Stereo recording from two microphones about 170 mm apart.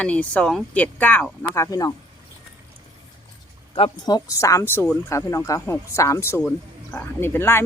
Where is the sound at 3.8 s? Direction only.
30° left (ahead or behind); by 7.6 s 15° left (ahead or behind).